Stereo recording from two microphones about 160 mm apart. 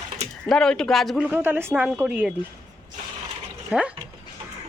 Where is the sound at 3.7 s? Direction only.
5° right (ahead or behind).